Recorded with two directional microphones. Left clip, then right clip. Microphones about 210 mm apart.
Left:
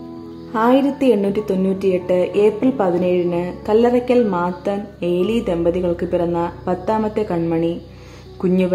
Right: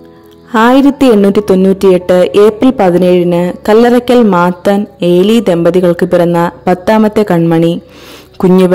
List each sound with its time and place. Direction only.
0.5 s a woman's voice: 50° right (ahead or behind)